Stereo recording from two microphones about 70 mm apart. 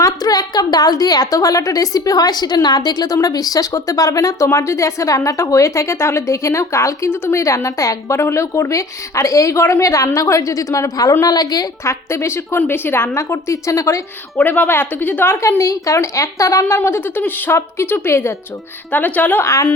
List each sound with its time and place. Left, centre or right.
0.0 s a woman's voice: left
4.4 s a woman's voice: left
11.3 s a woman's voice: left
11.9 s a woman's voice: left
14.4 s a woman's voice: left
15.4 s a woman's voice: left
16.7 s a woman's voice: left
18.9 s a woman's voice: left
19.5 s a woman's voice: left